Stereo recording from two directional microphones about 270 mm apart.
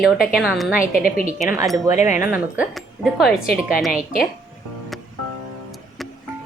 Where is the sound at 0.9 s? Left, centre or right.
Left.